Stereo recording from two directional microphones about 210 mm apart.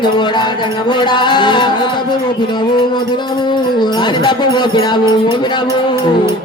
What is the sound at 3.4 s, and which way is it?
Music, 20° left (ahead or behind).